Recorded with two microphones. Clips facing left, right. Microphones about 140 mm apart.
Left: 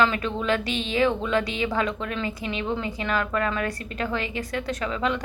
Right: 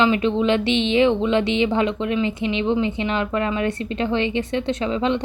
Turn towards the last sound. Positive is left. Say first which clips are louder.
# right 5 dB
turn(degrees=-25)  # may be behind; listen again after turning